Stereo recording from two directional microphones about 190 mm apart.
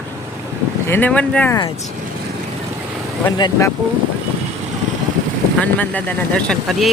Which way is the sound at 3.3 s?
20° left (ahead or behind).